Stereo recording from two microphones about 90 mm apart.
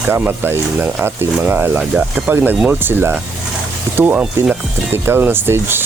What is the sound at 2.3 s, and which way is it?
Speech, 20° right (ahead or behind).